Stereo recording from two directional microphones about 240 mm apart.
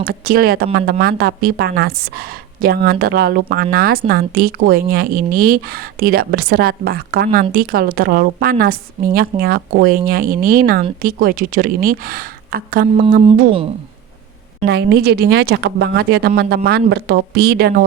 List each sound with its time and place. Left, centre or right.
0.0 s speech: right
14.7 s speech: right